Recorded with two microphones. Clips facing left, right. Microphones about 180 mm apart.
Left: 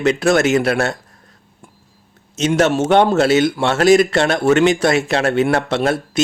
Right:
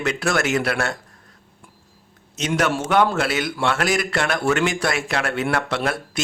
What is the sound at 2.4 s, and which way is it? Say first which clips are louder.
Speech: left 7 dB; 25° left (ahead or behind).